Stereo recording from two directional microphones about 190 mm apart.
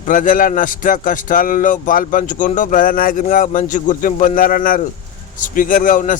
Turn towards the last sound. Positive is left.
turn(degrees=45)  # may be behind; listen again after turning